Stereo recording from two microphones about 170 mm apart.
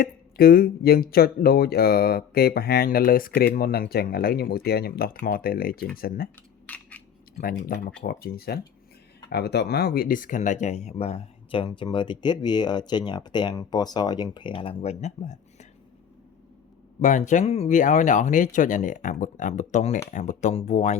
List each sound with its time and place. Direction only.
0.0 s speech: 60° left (ahead or behind)
6.7 s a sound: 10° left (ahead or behind)
7.3 s speech: 75° left (ahead or behind)
8.0 s speech: 65° left (ahead or behind); by 15.6 s 45° left (ahead or behind)
17.0 s speech: 45° left (ahead or behind)